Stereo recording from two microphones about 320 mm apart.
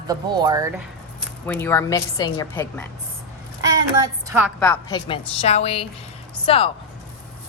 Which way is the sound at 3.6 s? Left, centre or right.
Centre.